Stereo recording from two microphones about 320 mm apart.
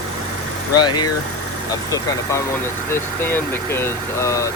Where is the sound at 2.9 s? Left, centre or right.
Centre.